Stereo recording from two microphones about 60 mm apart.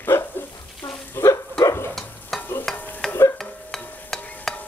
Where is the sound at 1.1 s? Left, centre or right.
Left.